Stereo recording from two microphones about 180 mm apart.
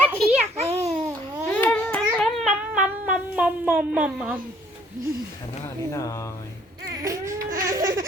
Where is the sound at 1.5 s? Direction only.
10° left (ahead or behind); by 4.4 s 5° right (ahead or behind).